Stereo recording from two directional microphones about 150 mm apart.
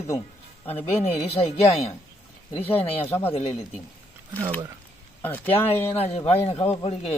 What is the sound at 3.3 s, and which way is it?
Speech, 45° left (ahead or behind).